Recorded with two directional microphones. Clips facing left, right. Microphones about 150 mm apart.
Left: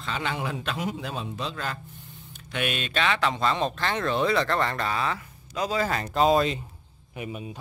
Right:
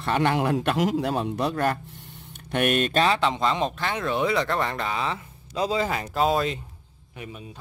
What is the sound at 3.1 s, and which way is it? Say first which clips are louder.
Speech: right 2 dB; 20° right (ahead or behind).